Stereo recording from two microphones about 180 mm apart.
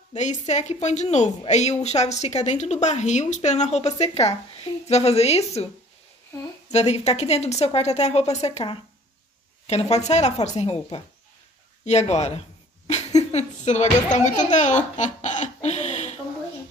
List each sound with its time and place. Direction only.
0.1 s a woman's voice: 40° left (ahead or behind)
6.7 s a woman's voice: 35° left (ahead or behind)
11.8 s a sound: 40° left (ahead or behind)
14.5 s speech: 40° left (ahead or behind)